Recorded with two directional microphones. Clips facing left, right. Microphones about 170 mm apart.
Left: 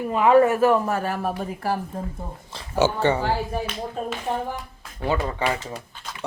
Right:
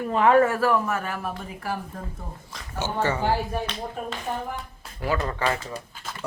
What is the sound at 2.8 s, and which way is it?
Speech, 90° left.